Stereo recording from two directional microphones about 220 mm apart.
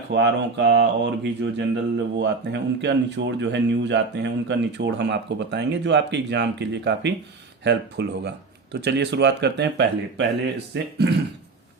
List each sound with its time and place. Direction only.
0.1 s speech: 50° right (ahead or behind)